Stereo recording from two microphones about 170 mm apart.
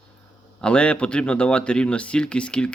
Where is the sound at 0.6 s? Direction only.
5° left (ahead or behind).